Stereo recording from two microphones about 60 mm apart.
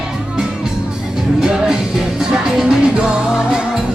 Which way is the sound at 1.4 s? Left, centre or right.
Centre.